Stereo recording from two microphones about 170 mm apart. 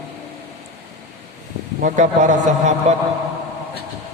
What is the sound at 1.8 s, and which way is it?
A man's voice, 50° right (ahead or behind).